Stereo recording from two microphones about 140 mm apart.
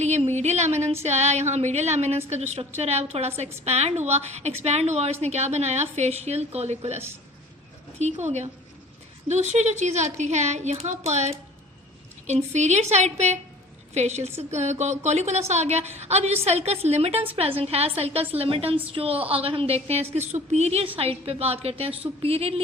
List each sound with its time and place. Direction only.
0.0 s a sound: 55° right (ahead or behind)
1.0 s a woman's voice: 50° right (ahead or behind)
12.5 s a woman's voice: 55° right (ahead or behind)